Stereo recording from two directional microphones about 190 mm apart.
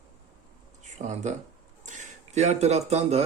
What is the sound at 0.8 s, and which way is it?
Speech, 40° right (ahead or behind).